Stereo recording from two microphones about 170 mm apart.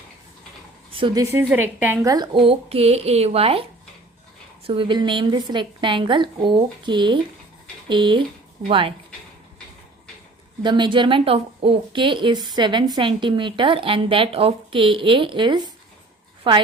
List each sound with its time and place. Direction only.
0.9 s a woman's voice: 30° right (ahead or behind)
10.6 s a woman's voice: 25° right (ahead or behind)